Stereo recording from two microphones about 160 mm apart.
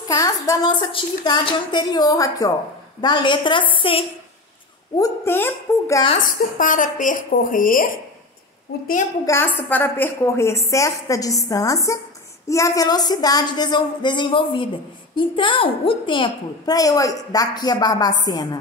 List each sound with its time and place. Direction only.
0.1 s a woman's voice: 20° left (ahead or behind)
4.9 s a woman's voice: 20° left (ahead or behind)
6.2 s speech: 55° left (ahead or behind)
9.2 s a woman's voice: 15° left (ahead or behind)